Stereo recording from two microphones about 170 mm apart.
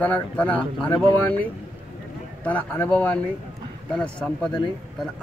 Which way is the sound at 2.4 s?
10° left (ahead or behind).